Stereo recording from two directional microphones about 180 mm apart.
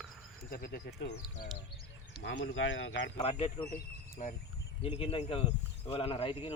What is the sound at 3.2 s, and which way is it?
Speech, 40° left (ahead or behind).